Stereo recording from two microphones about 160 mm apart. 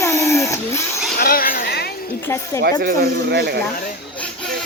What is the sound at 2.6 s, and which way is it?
Speech, 65° right (ahead or behind).